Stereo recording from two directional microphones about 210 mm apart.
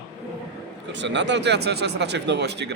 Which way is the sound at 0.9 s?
60° right (ahead or behind).